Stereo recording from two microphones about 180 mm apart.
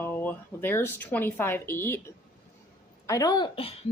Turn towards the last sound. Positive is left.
turn(degrees=30)  # may be behind; listen again after turning